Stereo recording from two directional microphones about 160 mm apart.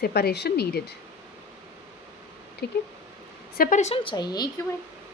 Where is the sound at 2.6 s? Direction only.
90° left.